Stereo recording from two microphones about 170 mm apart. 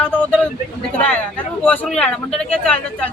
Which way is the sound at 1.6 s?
10° left (ahead or behind).